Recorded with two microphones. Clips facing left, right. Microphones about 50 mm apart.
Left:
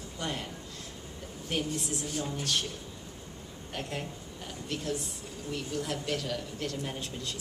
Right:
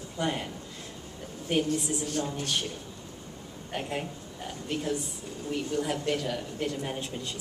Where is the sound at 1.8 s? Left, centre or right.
Centre.